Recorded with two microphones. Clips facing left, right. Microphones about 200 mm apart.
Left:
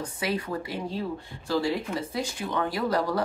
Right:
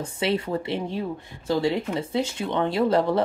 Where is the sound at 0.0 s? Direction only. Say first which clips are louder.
Right 5 dB; 25° right (ahead or behind).